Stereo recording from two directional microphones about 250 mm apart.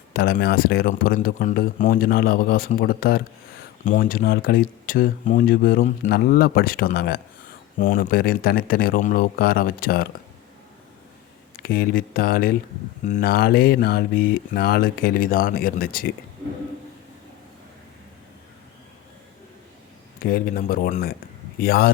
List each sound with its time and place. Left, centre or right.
0.1 s speech: left
11.6 s speech: left
20.2 s speech: left